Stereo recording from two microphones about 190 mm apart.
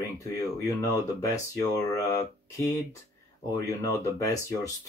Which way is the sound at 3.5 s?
15° left (ahead or behind).